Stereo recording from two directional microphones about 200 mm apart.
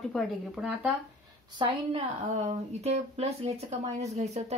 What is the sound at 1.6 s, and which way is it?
Speech, 25° right (ahead or behind).